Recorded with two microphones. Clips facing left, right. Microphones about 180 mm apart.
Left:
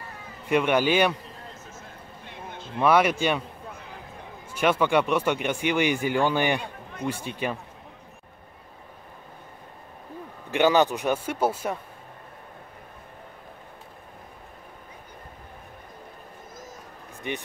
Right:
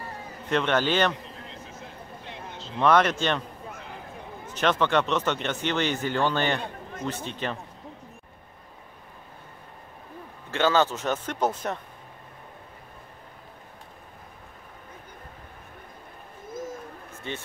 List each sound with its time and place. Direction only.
0.5 s speech: 10° left (ahead or behind)
1.5 s a sound: 45° left (ahead or behind)
2.8 s speech: 10° left (ahead or behind)
4.5 s speech: 10° left (ahead or behind)
10.5 s speech: 15° left (ahead or behind)
17.3 s speech: 15° left (ahead or behind)